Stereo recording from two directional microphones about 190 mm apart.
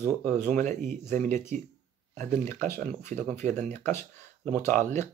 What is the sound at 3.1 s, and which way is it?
Speech, 40° right (ahead or behind).